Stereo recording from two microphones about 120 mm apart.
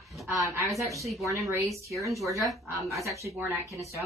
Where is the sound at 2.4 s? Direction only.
25° right (ahead or behind).